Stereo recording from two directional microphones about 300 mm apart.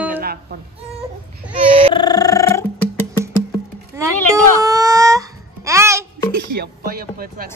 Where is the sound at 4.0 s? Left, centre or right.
Centre.